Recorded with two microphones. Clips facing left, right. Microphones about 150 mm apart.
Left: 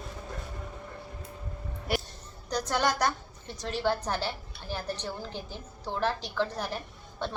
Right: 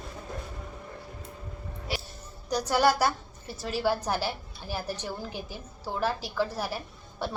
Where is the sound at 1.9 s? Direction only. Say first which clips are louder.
Left 4 dB; 55° left (ahead or behind).